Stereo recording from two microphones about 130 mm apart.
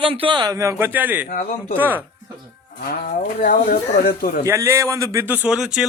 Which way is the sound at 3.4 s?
90° left.